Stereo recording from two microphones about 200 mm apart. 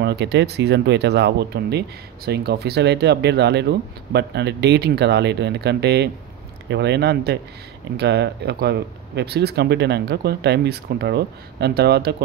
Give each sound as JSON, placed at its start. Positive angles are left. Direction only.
{"t": 0.0, "sound": "speech", "side_deg": -55}